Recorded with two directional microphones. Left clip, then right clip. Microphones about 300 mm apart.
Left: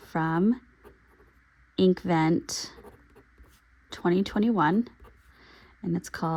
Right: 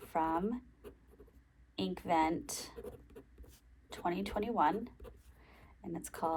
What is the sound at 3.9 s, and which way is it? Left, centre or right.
A woman's voice, left.